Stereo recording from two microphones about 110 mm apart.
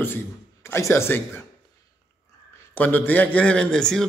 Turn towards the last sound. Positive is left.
turn(degrees=5)  # may be behind; listen again after turning